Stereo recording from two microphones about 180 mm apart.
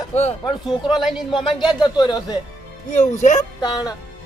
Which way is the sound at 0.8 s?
Centre (ahead or behind).